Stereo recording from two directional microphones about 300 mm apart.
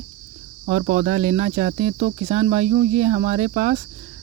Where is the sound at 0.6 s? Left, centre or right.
Right.